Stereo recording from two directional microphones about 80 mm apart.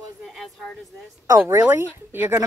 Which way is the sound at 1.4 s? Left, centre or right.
Right.